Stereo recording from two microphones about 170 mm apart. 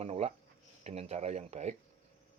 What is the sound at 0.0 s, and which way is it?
Speech, 40° right (ahead or behind).